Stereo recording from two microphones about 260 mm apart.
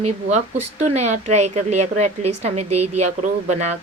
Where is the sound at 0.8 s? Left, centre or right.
Right.